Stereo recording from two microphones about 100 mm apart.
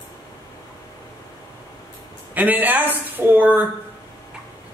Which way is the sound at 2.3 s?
15° right (ahead or behind).